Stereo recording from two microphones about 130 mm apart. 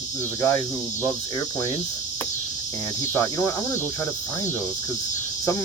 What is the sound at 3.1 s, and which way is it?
Speech, 20° left (ahead or behind).